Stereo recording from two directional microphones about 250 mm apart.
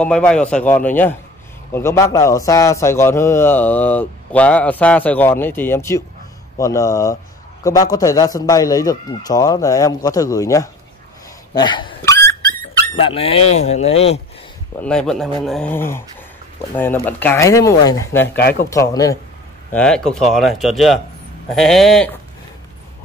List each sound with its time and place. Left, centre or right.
0.0 s a man's voice: centre; by 14.2 s left
14.8 s a man's voice: centre
18.4 s speech: left
18.7 s a man's voice: centre